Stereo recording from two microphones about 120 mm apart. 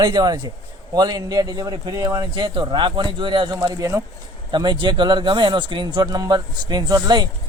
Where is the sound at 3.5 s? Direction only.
30° right (ahead or behind).